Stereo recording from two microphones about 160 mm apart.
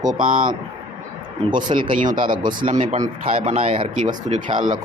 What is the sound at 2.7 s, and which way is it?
Speech, 45° right (ahead or behind).